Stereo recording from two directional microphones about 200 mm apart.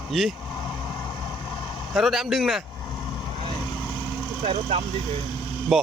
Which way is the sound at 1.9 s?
Centre (ahead or behind).